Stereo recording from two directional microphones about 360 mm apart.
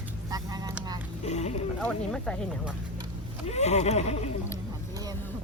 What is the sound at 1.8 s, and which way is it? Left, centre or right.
Speech, centre.